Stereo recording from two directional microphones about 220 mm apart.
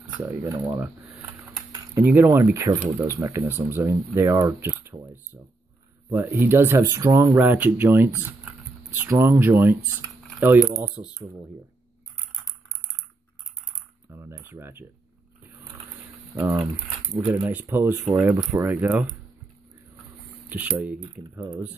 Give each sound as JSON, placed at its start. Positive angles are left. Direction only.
{"t": 0.2, "sound": "speech", "side_deg": -10}
{"t": 2.0, "sound": "speech", "side_deg": -10}
{"t": 14.1, "sound": "speech", "side_deg": -10}
{"t": 16.3, "sound": "speech", "side_deg": -10}
{"t": 20.4, "sound": "speech", "side_deg": -5}
{"t": 21.0, "sound": "speech", "side_deg": -20}